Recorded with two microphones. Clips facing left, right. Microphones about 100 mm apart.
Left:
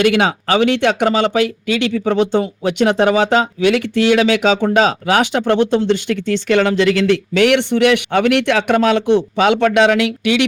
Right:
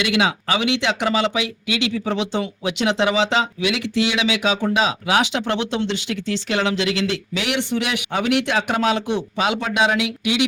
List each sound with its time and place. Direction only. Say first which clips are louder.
0.0 s speech: left 6 dB; 50° left (ahead or behind)